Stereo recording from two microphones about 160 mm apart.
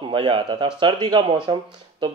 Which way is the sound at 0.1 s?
30° right (ahead or behind).